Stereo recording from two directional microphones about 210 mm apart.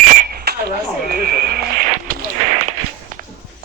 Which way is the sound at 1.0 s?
45° right (ahead or behind).